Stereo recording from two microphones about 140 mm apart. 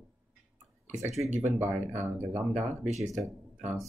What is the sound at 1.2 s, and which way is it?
Speech, 55° right (ahead or behind).